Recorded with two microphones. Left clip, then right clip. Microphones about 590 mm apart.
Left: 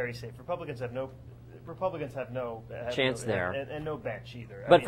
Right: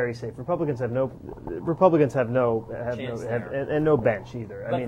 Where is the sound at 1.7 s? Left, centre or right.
Right.